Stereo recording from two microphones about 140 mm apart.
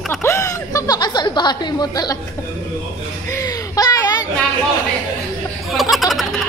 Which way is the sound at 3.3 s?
25° left (ahead or behind).